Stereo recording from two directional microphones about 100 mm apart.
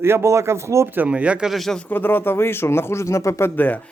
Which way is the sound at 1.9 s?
20° left (ahead or behind).